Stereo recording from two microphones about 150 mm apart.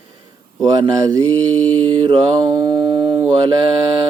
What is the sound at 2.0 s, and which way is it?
Mantra, 30° right (ahead or behind).